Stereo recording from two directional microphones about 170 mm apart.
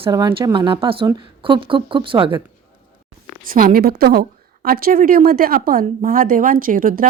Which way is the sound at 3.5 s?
55° right (ahead or behind).